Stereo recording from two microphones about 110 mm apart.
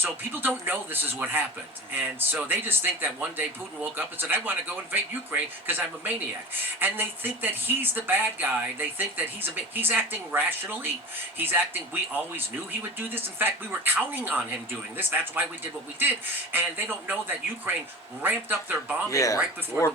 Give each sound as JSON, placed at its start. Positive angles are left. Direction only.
{"t": 0.0, "sound": "speech", "side_deg": -20}
{"t": 13.4, "sound": "speech", "side_deg": -15}
{"t": 19.1, "sound": "speech", "side_deg": 30}
{"t": 19.7, "sound": "speech", "side_deg": -20}